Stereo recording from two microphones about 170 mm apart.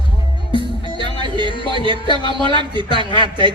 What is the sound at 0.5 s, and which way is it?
Music, 30° left (ahead or behind).